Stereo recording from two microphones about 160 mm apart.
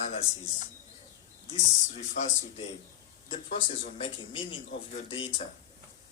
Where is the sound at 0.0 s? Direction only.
45° left (ahead or behind).